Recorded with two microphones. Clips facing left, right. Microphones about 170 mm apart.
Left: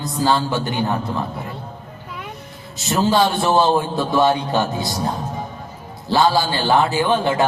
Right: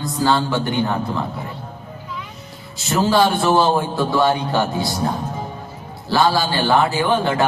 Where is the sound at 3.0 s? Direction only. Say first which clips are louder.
Right 1 dB; 20° left (ahead or behind).